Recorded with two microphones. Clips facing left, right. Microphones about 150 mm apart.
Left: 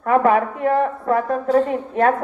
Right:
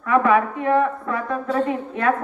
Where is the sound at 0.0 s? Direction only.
40° left (ahead or behind).